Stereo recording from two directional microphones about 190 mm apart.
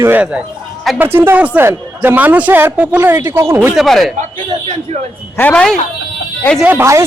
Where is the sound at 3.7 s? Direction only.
Centre (ahead or behind).